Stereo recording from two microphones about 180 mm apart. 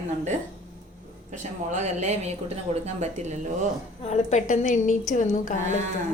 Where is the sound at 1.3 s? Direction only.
40° right (ahead or behind).